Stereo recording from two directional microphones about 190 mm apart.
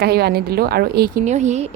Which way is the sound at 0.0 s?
55° right (ahead or behind).